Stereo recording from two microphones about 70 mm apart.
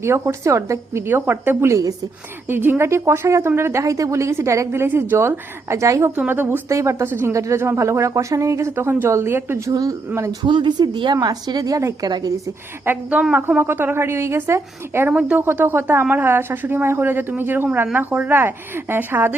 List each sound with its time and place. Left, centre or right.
0.0 s a woman's voice: right
1.0 s a woman's voice: right
6.1 s a woman's voice: right
6.7 s a woman's voice: right
9.6 s a woman's voice: right
10.1 s a woman's voice: right
10.4 s a woman's voice: right
13.1 s a woman's voice: right
15.1 s speech: centre
15.4 s a woman's voice: right